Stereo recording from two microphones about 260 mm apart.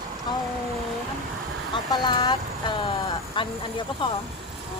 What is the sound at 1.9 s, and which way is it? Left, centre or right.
Speech, centre.